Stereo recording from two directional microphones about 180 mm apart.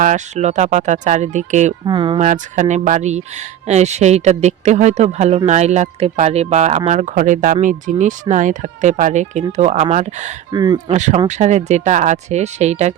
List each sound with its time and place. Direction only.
0.0 s speech: 40° right (ahead or behind)
1.8 s speech: 25° right (ahead or behind)
2.2 s speech: 45° right (ahead or behind)
10.5 s speech: 25° right (ahead or behind)
10.9 s speech: 40° right (ahead or behind)